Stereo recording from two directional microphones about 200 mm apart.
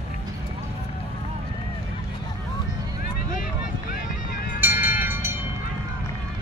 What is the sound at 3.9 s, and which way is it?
Vehicle, 50° left (ahead or behind).